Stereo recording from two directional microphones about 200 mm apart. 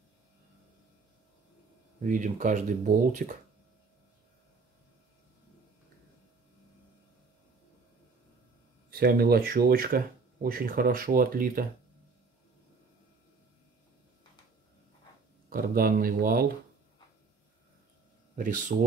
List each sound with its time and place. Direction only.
2.0 s speech: 40° right (ahead or behind)
8.9 s speech: 45° right (ahead or behind)
15.5 s speech: 45° right (ahead or behind)
18.3 s speech: 40° right (ahead or behind)